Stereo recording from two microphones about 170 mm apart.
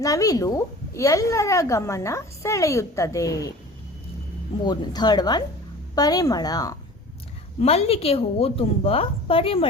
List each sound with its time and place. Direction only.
0.0 s a woman's voice: 20° left (ahead or behind)
4.6 s a woman's voice: 25° left (ahead or behind)
7.6 s a woman's voice: 35° left (ahead or behind)